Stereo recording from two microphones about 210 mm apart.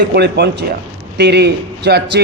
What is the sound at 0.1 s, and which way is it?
A man's voice, 50° right (ahead or behind).